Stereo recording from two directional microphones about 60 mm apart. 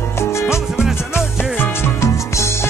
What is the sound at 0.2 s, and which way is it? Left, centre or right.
Music, left.